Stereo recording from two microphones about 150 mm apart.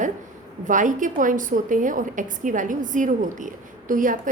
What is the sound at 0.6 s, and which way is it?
A woman's voice, 60° right (ahead or behind).